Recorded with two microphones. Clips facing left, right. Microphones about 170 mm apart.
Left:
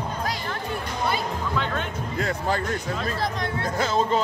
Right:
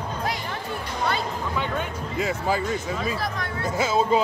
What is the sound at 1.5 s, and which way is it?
Speech, 10° right (ahead or behind).